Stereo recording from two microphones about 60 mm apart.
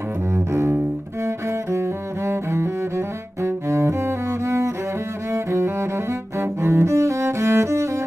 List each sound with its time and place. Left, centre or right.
0.3 s double bass: right
1.2 s cello: right